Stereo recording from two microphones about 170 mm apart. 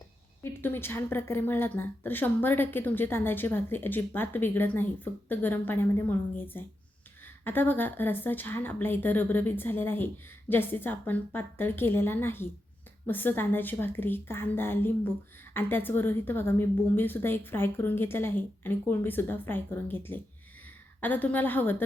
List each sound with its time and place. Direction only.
0.4 s a woman's voice: 15° left (ahead or behind)